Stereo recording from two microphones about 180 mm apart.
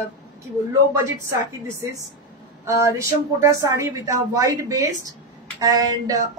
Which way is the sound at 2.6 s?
15° right (ahead or behind).